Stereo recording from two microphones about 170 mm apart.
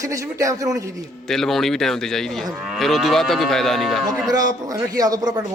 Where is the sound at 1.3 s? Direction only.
Centre (ahead or behind).